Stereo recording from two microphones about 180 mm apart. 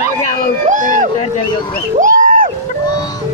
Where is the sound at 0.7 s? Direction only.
45° right (ahead or behind).